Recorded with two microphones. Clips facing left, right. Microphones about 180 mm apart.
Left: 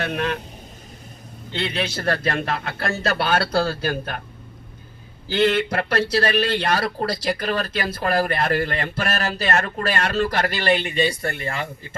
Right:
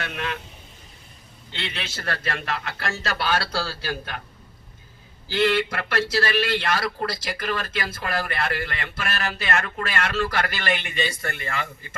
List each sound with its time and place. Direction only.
0.0 s speech: 35° left (ahead or behind)
1.5 s speech: 35° left (ahead or behind)
3.2 s speech: 55° left (ahead or behind)
5.7 s speech: 35° left (ahead or behind)